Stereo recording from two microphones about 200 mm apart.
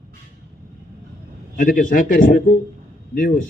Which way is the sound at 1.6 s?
40° left (ahead or behind).